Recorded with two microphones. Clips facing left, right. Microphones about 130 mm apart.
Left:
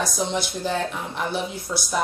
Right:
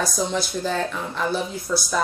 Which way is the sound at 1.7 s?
35° left (ahead or behind).